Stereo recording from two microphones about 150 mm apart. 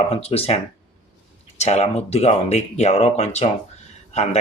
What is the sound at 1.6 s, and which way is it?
Speech, 45° left (ahead or behind).